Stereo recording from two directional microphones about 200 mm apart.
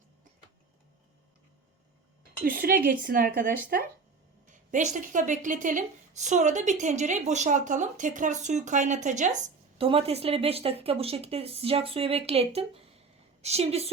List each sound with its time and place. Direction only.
2.4 s a woman's voice: 45° right (ahead or behind); by 13.9 s 30° right (ahead or behind)